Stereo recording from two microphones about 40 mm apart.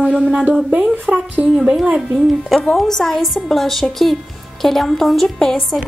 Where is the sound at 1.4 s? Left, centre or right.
Right.